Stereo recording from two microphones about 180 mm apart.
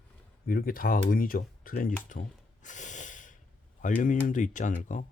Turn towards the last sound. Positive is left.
turn(degrees=45)  # may be behind; listen again after turning